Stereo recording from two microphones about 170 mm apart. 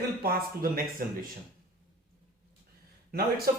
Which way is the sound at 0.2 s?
65° right (ahead or behind).